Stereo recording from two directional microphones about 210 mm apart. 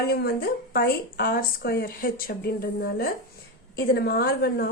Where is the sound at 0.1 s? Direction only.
45° left (ahead or behind).